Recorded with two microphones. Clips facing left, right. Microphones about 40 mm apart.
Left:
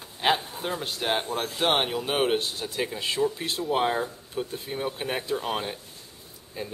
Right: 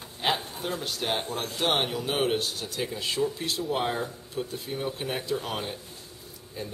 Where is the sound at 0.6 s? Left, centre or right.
Left.